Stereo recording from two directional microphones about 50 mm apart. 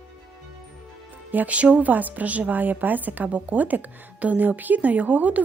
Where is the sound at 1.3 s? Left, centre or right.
Right.